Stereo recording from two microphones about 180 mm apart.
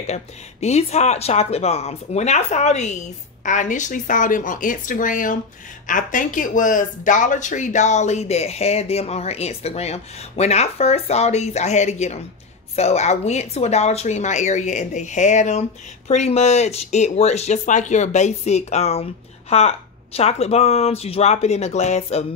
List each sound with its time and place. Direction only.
0.0 s speech: 40° left (ahead or behind)